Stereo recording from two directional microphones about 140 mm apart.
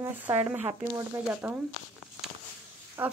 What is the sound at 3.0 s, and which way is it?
Speech, 15° right (ahead or behind).